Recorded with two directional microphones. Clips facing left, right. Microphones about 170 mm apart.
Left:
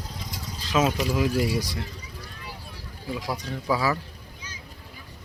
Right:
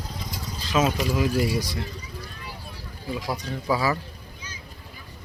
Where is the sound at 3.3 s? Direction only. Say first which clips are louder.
Right 1 dB; 10° right (ahead or behind).